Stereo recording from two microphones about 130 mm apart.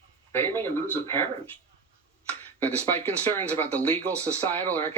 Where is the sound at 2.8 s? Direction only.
15° left (ahead or behind).